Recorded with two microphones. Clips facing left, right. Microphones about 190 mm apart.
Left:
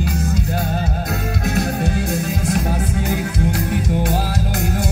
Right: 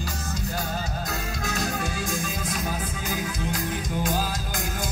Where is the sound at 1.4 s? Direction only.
60° left (ahead or behind).